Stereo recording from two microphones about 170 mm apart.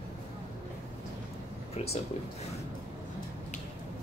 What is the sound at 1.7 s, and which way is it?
Speech, 40° left (ahead or behind).